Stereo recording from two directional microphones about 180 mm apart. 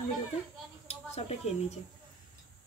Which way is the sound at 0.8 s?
35° left (ahead or behind).